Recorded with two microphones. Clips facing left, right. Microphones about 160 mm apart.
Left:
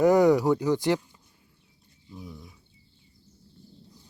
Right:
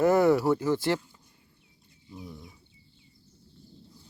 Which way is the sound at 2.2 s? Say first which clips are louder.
Left 1 dB; centre (ahead or behind).